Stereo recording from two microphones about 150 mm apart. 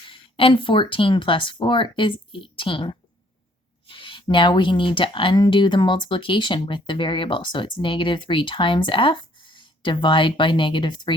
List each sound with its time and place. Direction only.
0.1 s speech: 35° left (ahead or behind)